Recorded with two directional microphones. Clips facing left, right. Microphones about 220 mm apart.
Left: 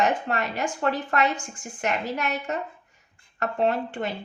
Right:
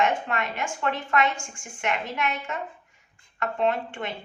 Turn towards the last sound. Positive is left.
turn(degrees=40)  # may be behind; listen again after turning